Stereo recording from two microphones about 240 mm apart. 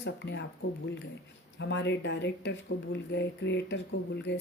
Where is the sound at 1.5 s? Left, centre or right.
Left.